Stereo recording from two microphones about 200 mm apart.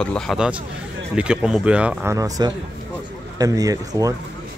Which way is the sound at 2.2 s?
20° right (ahead or behind).